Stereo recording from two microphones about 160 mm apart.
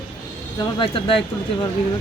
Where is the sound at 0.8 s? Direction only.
35° left (ahead or behind).